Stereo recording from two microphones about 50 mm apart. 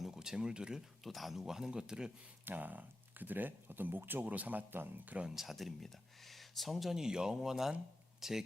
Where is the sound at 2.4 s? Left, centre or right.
Right.